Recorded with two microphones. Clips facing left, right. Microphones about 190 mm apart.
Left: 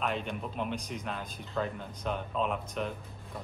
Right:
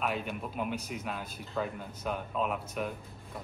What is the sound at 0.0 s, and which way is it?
A man's voice, 5° right (ahead or behind).